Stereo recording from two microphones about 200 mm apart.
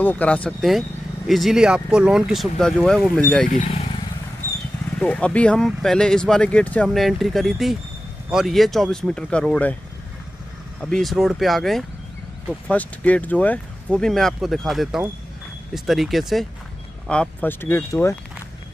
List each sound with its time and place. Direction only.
0.0 s speech: 5° left (ahead or behind)
3.4 s speech: 40° left (ahead or behind)
4.9 s speech: 5° left (ahead or behind)
10.8 s speech: 5° left (ahead or behind)